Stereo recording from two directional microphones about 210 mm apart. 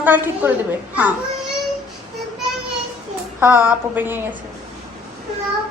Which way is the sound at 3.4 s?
10° right (ahead or behind).